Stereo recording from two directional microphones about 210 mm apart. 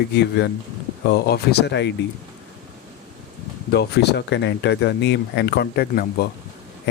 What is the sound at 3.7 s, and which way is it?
Speech, 50° left (ahead or behind).